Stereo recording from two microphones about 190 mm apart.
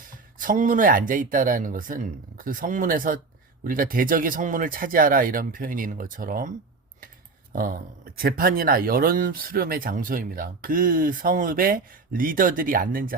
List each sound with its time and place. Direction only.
0.3 s speech: 45° right (ahead or behind)
7.5 s speech: 50° right (ahead or behind)